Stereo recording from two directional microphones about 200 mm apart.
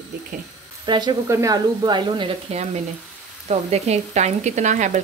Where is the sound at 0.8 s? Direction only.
20° right (ahead or behind).